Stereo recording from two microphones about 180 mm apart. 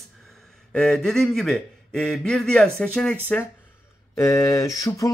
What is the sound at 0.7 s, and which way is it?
A man's voice, 5° left (ahead or behind).